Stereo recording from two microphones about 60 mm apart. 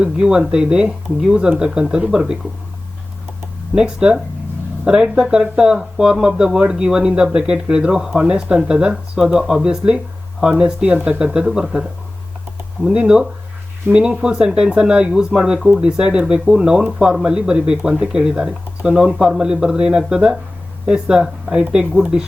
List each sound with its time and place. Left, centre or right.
0.0 s speech: centre
3.8 s speech: centre
11.2 s speech: centre